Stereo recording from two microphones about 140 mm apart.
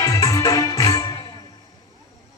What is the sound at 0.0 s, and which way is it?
Music, 25° left (ahead or behind).